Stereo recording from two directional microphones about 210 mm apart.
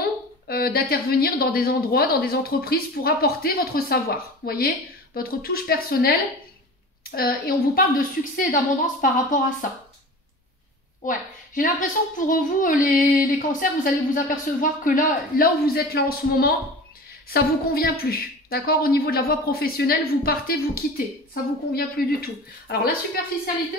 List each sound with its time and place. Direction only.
0.5 s a woman's voice: 45° left (ahead or behind)
11.1 s a woman's voice: 40° left (ahead or behind)
21.7 s a woman's voice: 45° left (ahead or behind)